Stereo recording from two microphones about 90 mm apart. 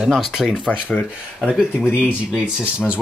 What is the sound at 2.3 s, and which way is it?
Speech, 10° right (ahead or behind).